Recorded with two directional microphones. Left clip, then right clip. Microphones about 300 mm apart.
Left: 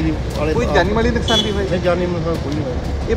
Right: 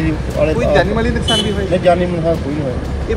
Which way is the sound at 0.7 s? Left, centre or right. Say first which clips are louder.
Right 1 dB; centre.